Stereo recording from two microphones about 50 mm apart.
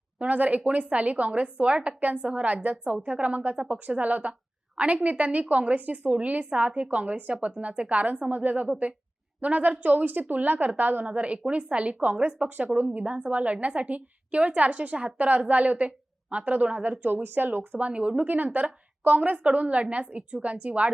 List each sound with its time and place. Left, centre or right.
0.2 s a woman's voice: right
11.0 s a woman's voice: right
12.5 s a woman's voice: right
17.7 s a woman's voice: right